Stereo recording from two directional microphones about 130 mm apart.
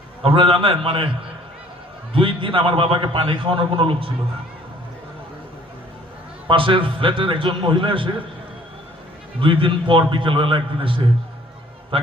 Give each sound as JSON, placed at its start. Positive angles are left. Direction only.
{"t": 0.2, "sound": "a man's voice", "side_deg": -45}
{"t": 2.1, "sound": "a man's voice", "side_deg": -40}
{"t": 6.5, "sound": "a man's voice", "side_deg": -40}
{"t": 9.4, "sound": "a man's voice", "side_deg": -40}